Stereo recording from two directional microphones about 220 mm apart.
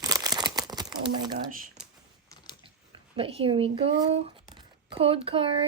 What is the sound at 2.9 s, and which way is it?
Speech, 25° right (ahead or behind).